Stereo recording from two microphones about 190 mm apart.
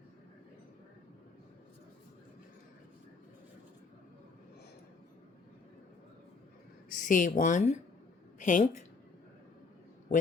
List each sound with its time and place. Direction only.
6.9 s a woman's voice: 45° left (ahead or behind)